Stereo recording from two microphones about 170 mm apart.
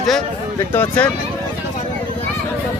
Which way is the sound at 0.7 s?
10° left (ahead or behind).